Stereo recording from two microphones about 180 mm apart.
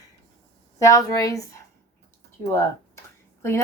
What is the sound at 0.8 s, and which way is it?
Speech, 20° left (ahead or behind).